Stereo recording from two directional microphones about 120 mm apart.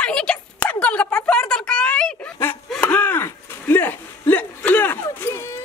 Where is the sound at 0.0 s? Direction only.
5° left (ahead or behind).